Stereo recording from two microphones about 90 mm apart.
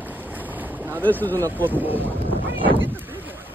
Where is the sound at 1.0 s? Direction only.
20° left (ahead or behind).